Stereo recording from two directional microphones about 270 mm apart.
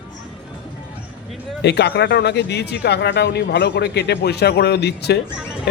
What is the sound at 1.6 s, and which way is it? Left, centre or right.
Speech, left.